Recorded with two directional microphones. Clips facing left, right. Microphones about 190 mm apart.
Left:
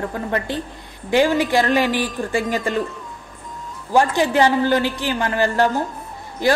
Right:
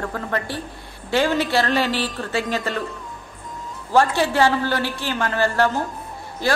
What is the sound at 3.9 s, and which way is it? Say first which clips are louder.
A woman's voice: left 1 dB; 15° left (ahead or behind).